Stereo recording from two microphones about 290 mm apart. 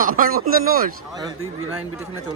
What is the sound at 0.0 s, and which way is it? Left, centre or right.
Speech, right.